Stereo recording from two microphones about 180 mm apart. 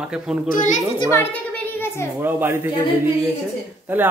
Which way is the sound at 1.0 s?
15° left (ahead or behind).